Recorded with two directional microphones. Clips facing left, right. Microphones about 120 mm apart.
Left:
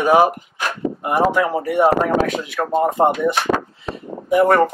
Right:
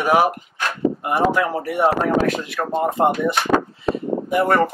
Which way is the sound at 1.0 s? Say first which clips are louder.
Left 4 dB; centre (ahead or behind).